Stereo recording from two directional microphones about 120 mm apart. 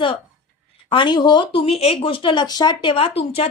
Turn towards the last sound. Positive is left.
turn(degrees=55)  # may be behind; listen again after turning